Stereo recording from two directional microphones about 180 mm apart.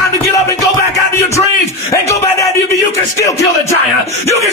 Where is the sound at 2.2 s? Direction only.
15° left (ahead or behind).